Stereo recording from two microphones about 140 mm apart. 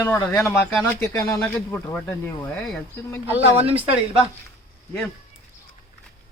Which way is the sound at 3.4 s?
45° right (ahead or behind).